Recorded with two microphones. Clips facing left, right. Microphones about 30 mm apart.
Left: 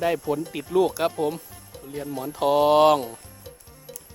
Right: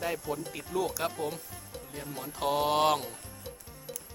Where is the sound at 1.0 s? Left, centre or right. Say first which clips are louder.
Left 8 dB; left.